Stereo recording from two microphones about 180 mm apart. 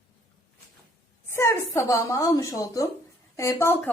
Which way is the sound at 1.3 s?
15° left (ahead or behind).